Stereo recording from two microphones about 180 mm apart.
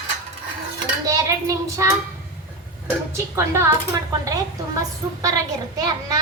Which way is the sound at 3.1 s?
15° right (ahead or behind).